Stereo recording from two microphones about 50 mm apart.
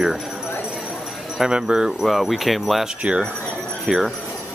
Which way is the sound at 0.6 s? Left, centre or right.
Centre.